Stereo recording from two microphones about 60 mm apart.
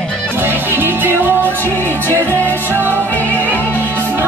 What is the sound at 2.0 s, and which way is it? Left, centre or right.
Music, left.